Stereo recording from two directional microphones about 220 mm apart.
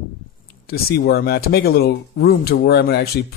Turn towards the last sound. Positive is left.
turn(degrees=45)  # may be behind; listen again after turning